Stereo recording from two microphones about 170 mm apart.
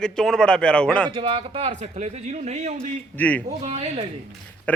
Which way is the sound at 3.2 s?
10° left (ahead or behind).